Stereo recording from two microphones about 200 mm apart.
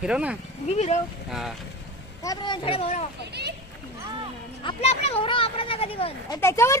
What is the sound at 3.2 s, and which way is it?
Speech, 55° right (ahead or behind).